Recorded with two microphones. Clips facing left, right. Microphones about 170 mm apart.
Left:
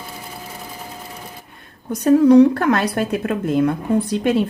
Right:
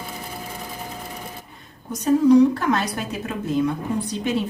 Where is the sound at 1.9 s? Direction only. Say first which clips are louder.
Left 4 dB; 60° left (ahead or behind).